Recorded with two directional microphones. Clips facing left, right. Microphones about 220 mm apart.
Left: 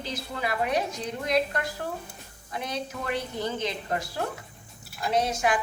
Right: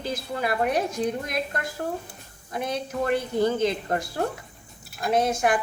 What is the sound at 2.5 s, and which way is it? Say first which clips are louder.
A woman's voice: right 4 dB; 50° right (ahead or behind).